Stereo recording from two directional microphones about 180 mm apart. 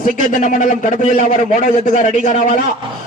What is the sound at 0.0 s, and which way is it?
A man's voice, 45° left (ahead or behind).